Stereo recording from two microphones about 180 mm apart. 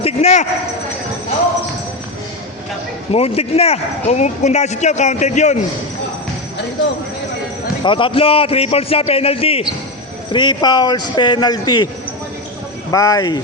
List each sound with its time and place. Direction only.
0.0 s speech: 35° left (ahead or behind)
3.1 s speech: 35° left (ahead or behind)
7.9 s a man's voice: 30° left (ahead or behind)
12.9 s a man's voice: 20° left (ahead or behind)